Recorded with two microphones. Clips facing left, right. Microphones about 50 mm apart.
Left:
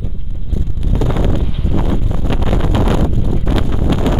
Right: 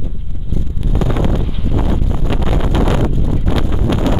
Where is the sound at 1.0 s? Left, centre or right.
Centre.